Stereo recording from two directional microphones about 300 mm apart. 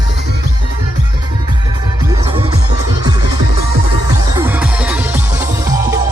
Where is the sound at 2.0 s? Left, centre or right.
Centre.